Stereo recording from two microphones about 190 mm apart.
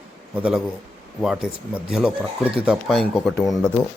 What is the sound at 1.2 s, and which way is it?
A man's voice, 5° right (ahead or behind).